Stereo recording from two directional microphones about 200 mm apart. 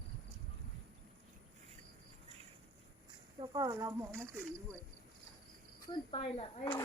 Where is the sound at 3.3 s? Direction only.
20° right (ahead or behind).